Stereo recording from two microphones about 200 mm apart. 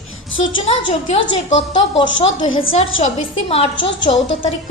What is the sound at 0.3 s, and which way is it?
Speech, 75° left (ahead or behind).